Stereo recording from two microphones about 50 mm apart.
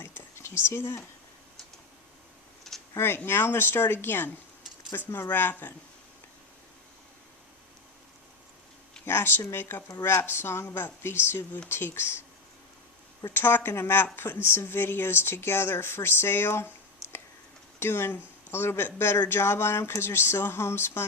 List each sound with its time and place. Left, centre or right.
0.0 s a sound: left
2.9 s speech: left
4.9 s speech: left
5.3 s speech: left
9.0 s speech: left
13.3 s speech: left